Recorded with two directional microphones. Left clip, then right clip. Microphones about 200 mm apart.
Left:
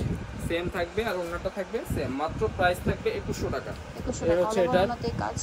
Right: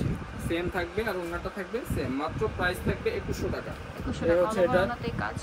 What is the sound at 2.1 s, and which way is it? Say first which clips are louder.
Speech: left 3 dB; centre (ahead or behind).